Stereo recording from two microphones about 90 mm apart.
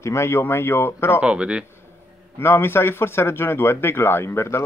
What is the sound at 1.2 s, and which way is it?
Speech, 10° right (ahead or behind).